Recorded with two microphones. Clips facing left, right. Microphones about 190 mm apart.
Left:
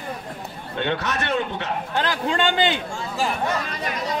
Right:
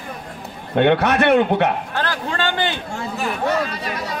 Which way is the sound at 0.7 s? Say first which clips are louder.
Right 10 dB; 60° right (ahead or behind).